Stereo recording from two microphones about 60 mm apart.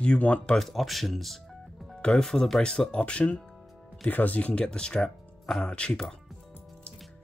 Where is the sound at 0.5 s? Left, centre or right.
Centre.